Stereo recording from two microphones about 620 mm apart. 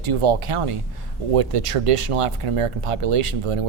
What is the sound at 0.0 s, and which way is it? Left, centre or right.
Speech, right.